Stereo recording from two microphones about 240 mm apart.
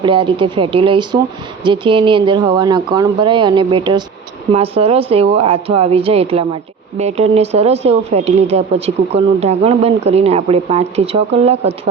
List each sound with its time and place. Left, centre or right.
0.0 s speech: right